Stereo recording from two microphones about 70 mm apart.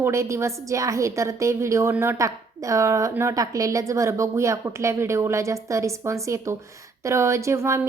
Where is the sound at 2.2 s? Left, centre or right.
Right.